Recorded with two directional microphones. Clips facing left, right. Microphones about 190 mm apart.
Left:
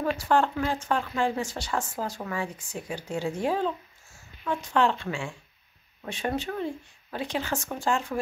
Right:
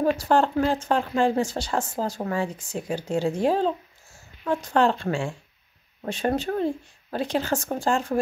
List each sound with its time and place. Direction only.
0.0 s speech: 35° right (ahead or behind)